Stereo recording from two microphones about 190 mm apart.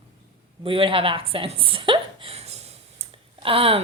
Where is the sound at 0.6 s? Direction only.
30° right (ahead or behind).